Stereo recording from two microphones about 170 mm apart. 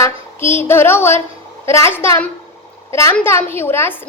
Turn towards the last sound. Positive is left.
turn(degrees=15)  # may be behind; listen again after turning